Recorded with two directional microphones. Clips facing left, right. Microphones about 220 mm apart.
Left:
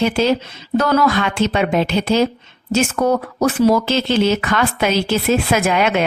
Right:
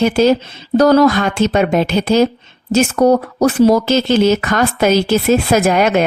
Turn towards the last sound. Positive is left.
turn(degrees=-40)  # may be behind; listen again after turning